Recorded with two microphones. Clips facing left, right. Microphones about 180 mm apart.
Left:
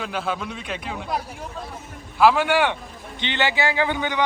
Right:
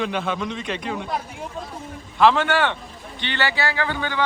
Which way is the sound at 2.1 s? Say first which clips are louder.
Even; 10° left (ahead or behind).